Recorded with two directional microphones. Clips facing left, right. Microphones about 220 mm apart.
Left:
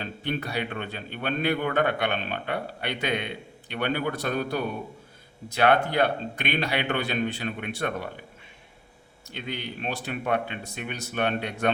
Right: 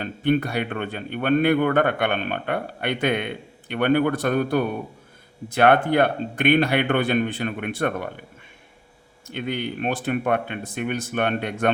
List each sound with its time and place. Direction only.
0.0 s a man's voice: 55° right (ahead or behind)
9.2 s a man's voice: 55° right (ahead or behind)